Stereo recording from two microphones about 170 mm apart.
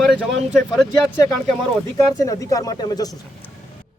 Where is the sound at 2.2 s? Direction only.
20° left (ahead or behind).